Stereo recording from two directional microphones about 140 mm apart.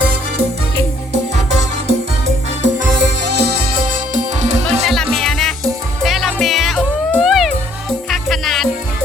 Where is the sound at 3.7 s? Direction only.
70° right (ahead or behind).